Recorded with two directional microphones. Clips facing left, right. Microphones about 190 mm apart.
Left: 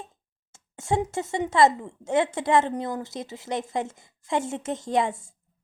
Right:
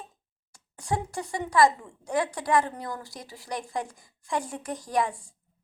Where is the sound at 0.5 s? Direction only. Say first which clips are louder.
Left 5 dB; 25° left (ahead or behind).